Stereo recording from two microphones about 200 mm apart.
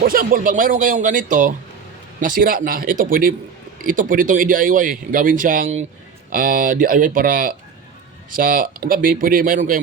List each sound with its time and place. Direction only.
0.0 s speech: 45° right (ahead or behind)